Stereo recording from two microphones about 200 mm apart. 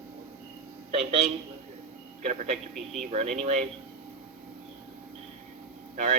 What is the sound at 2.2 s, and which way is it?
A man's voice, 30° right (ahead or behind).